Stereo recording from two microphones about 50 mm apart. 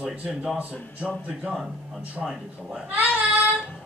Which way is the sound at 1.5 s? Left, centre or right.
Centre.